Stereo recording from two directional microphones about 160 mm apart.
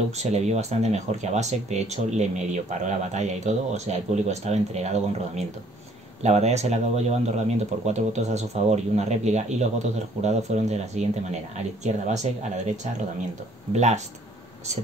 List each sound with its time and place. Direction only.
0.1 s speech: 45° right (ahead or behind)
13.7 s speech: 45° right (ahead or behind)